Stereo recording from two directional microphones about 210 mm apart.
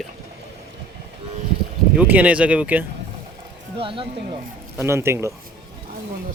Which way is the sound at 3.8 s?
25° right (ahead or behind).